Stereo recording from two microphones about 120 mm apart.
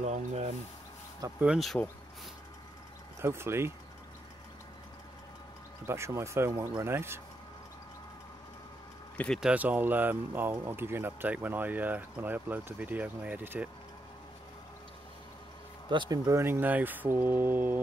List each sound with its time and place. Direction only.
0.0 s a sound: 65° right (ahead or behind)
1.4 s speech: 5° right (ahead or behind)
3.2 s speech: 20° right (ahead or behind)
5.9 s speech: 20° right (ahead or behind)
9.1 s speech: 10° left (ahead or behind)
9.4 s speech: 10° right (ahead or behind)
15.9 s speech: 40° right (ahead or behind)
16.3 s speech: 20° right (ahead or behind)